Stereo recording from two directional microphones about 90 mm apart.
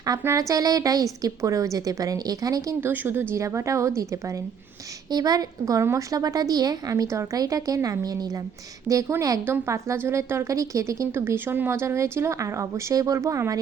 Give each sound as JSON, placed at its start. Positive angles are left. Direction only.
{"t": 0.1, "sound": "speech", "side_deg": -40}
{"t": 2.8, "sound": "speech", "side_deg": -20}
{"t": 5.1, "sound": "speech", "side_deg": -45}